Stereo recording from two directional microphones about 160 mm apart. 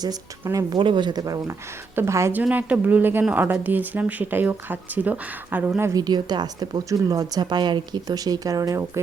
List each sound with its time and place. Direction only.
0.4 s a woman's voice: 25° right (ahead or behind)